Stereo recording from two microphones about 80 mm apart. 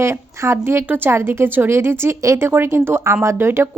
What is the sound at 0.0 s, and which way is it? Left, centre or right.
A woman's voice, right.